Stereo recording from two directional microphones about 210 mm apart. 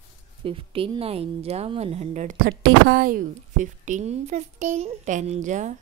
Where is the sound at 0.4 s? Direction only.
25° right (ahead or behind).